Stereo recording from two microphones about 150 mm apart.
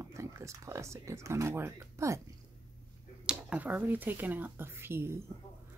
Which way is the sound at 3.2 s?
10° right (ahead or behind).